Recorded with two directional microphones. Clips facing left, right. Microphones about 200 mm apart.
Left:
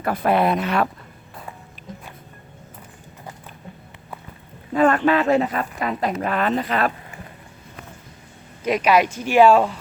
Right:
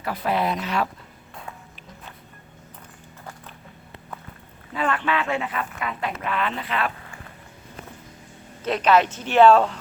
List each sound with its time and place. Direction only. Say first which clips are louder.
0.0 s speech: left 5 dB; 50° left (ahead or behind)
4.7 s speech: left 8 dB; 45° left (ahead or behind)
8.6 s speech: left 1 dB; 10° left (ahead or behind)